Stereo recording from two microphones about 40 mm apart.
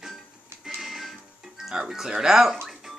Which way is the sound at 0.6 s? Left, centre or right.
Centre.